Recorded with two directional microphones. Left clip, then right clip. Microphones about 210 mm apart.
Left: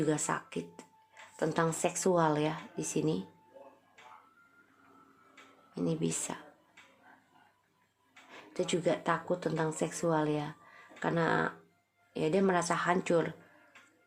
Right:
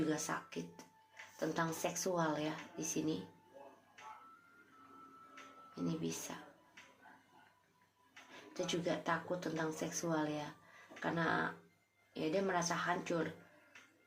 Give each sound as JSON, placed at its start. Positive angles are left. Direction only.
{"t": 0.1, "sound": "speech", "side_deg": 40}
{"t": 5.7, "sound": "speech", "side_deg": 45}
{"t": 8.3, "sound": "speech", "side_deg": 40}